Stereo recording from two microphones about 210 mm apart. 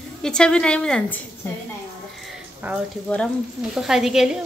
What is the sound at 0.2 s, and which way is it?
A woman's voice, 5° left (ahead or behind).